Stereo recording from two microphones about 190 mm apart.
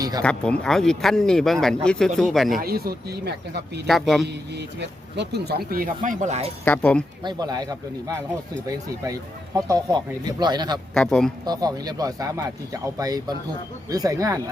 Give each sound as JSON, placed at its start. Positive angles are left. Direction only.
{"t": 0.2, "sound": "speech", "side_deg": 5}
{"t": 2.6, "sound": "speech", "side_deg": -55}
{"t": 3.8, "sound": "speech", "side_deg": 0}
{"t": 4.8, "sound": "speech", "side_deg": -65}
{"t": 6.7, "sound": "speech", "side_deg": 5}
{"t": 7.3, "sound": "speech", "side_deg": -20}
{"t": 9.6, "sound": "speech", "side_deg": -20}
{"t": 10.9, "sound": "speech", "side_deg": 5}
{"t": 11.4, "sound": "speech", "side_deg": -20}